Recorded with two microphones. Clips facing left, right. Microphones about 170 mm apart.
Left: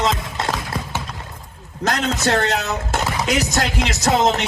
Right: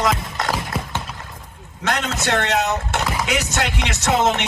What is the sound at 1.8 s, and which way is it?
Music, 35° left (ahead or behind).